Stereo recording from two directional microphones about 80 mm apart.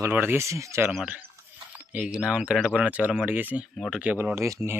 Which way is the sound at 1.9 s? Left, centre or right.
Centre.